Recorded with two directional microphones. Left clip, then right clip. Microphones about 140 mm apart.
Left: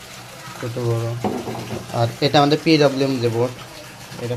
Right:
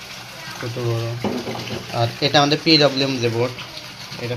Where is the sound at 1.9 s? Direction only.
35° left (ahead or behind).